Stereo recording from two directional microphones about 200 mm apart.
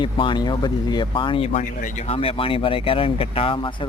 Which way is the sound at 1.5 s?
40° left (ahead or behind).